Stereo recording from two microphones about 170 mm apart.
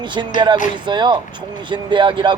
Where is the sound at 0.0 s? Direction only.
25° right (ahead or behind).